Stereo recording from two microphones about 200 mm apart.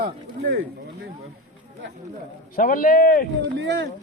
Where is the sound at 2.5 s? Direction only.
45° left (ahead or behind).